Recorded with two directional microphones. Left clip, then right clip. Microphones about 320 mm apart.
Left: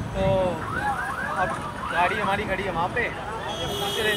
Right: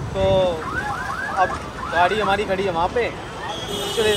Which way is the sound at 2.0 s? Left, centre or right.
Centre.